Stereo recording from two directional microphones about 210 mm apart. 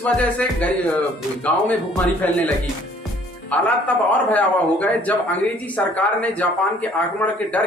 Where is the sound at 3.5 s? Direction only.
5° left (ahead or behind).